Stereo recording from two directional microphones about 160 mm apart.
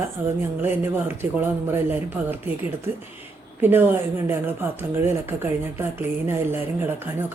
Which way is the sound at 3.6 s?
15° right (ahead or behind).